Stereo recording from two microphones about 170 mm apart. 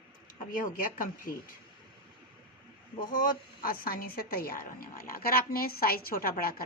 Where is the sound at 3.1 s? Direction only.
55° left (ahead or behind).